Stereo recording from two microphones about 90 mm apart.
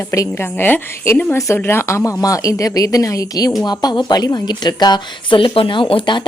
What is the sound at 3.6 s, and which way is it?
A woman's voice, 55° left (ahead or behind).